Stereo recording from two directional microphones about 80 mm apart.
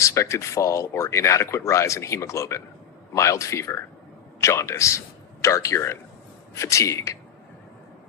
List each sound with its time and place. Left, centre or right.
0.0 s a man's voice: left